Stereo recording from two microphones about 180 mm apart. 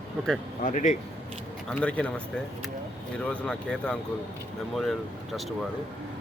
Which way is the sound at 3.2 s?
5° left (ahead or behind).